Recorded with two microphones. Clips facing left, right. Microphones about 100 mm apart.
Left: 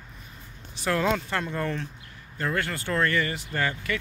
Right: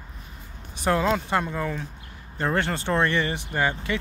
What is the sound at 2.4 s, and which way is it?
Speech, 30° right (ahead or behind).